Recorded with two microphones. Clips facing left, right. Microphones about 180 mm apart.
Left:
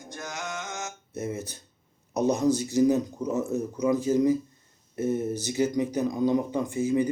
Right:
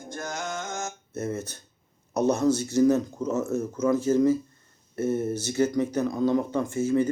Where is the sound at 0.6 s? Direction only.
45° right (ahead or behind).